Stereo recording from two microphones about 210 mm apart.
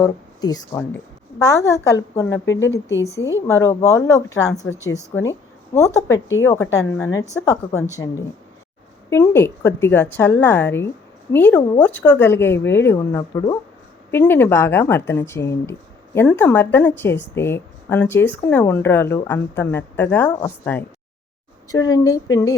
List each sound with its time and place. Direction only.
0.0 s speech: 15° left (ahead or behind)
2.5 s speech: 60° left (ahead or behind)
3.0 s speech: 15° left (ahead or behind)
9.0 s speech: 15° left (ahead or behind)